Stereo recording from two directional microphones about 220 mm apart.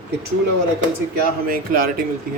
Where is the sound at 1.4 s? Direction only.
40° right (ahead or behind).